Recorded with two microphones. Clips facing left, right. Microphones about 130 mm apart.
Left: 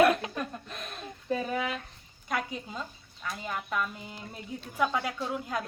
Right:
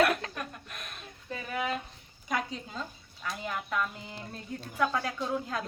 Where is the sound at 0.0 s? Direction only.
20° left (ahead or behind).